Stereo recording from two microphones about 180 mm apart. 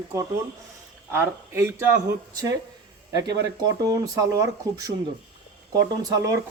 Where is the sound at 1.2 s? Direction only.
15° right (ahead or behind).